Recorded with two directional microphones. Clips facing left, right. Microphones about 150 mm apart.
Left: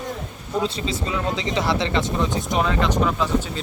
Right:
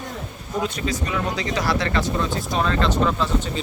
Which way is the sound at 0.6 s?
25° left (ahead or behind).